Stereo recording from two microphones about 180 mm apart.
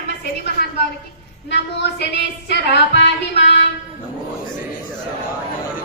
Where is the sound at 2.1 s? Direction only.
75° left (ahead or behind).